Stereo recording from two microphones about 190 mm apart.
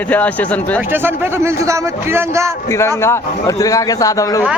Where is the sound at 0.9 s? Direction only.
10° right (ahead or behind).